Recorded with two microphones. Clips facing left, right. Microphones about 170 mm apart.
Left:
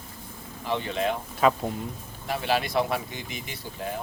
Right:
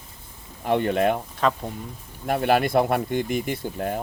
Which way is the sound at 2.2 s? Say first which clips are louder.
Right 6 dB; 55° right (ahead or behind).